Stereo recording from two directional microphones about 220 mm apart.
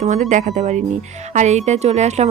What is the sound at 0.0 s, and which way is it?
Speech, 30° right (ahead or behind).